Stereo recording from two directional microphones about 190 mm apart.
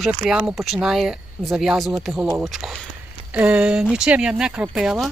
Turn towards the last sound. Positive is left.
turn(degrees=0)  # may be behind; listen again after turning